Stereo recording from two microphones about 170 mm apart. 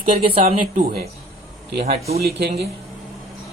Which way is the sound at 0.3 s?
35° right (ahead or behind).